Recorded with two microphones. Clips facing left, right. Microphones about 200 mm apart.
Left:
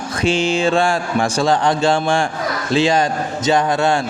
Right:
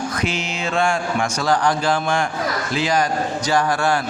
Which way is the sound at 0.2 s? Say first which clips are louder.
Left 8 dB; 30° left (ahead or behind).